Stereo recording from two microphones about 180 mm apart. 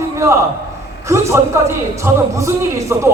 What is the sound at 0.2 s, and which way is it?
A man's voice, 15° right (ahead or behind).